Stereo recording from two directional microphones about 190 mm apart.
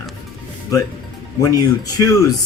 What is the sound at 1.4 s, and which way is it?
Speech, 15° left (ahead or behind).